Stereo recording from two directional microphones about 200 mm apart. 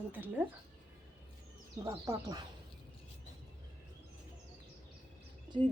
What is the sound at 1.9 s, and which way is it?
Speech, 15° right (ahead or behind).